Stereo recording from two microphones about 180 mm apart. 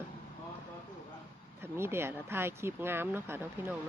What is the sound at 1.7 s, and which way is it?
Speech, 15° right (ahead or behind).